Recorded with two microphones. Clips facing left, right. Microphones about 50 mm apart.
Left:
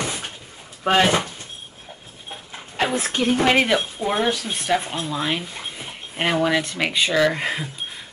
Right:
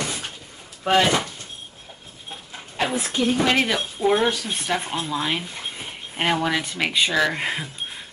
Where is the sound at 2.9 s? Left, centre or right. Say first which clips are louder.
Even; left.